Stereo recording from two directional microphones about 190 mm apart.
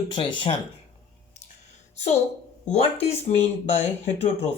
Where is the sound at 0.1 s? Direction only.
25° left (ahead or behind).